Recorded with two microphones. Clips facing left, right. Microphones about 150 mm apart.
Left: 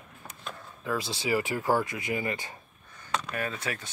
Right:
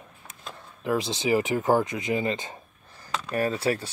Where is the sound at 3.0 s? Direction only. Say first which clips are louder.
Right 5 dB; 35° right (ahead or behind).